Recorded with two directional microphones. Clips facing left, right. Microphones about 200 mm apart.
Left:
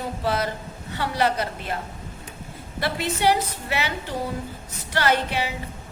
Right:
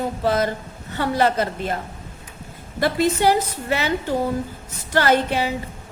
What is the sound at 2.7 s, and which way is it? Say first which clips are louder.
A woman's voice: right 7 dB; 45° right (ahead or behind).